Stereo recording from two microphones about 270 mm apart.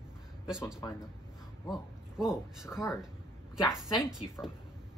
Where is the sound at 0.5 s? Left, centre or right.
Centre.